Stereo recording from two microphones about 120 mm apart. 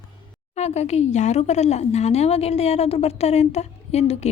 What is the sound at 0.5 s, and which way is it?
Speech, 65° left (ahead or behind).